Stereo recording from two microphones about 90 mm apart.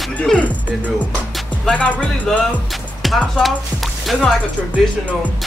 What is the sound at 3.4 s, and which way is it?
Speech, centre (ahead or behind).